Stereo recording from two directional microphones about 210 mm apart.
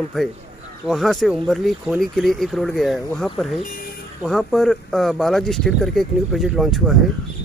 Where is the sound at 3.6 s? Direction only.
40° left (ahead or behind).